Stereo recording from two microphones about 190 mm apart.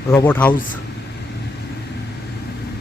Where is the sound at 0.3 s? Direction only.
10° left (ahead or behind).